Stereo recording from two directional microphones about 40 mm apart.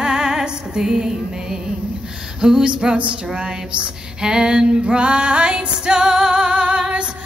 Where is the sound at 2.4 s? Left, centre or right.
Right.